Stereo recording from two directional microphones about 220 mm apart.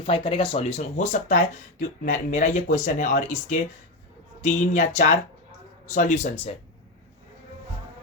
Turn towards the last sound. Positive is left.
turn(degrees=30)  # may be behind; listen again after turning